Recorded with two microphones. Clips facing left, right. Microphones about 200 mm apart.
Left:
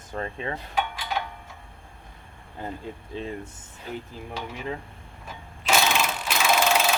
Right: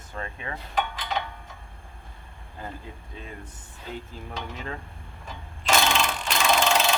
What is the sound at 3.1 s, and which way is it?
Speech, 30° left (ahead or behind).